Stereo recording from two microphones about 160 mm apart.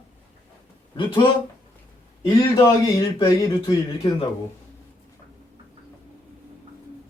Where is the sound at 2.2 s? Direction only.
25° left (ahead or behind).